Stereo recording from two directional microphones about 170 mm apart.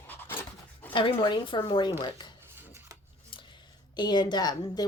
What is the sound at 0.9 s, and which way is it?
Speech, 30° left (ahead or behind).